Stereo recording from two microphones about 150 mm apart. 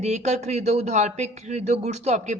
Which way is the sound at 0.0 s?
50° right (ahead or behind).